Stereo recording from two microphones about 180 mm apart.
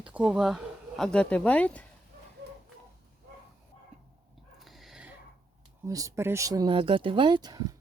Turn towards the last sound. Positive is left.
turn(degrees=-20)  # may be behind; listen again after turning